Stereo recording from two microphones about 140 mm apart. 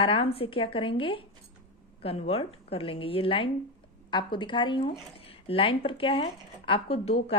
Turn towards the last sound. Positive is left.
turn(degrees=45)  # may be behind; listen again after turning